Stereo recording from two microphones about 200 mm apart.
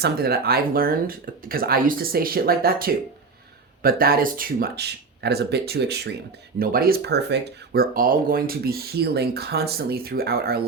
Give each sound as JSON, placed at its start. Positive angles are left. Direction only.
{"t": 0.0, "sound": "speech", "side_deg": -50}